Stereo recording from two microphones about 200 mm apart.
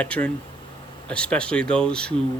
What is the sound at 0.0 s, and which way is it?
Speech, 5° left (ahead or behind).